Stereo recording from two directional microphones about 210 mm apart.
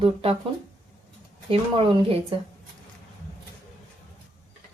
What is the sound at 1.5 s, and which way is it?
Speech, 25° right (ahead or behind).